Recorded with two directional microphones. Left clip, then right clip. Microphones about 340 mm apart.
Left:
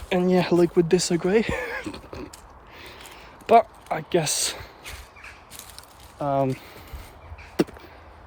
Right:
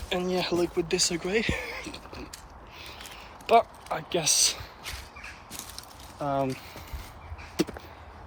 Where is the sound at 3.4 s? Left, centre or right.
Left.